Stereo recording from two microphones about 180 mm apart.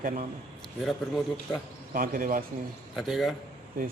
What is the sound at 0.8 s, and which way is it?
Speech, centre (ahead or behind).